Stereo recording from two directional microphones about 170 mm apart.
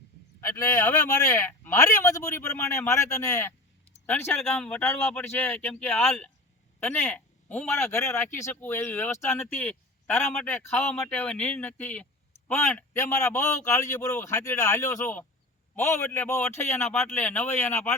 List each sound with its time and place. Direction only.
0.4 s speech: 20° left (ahead or behind)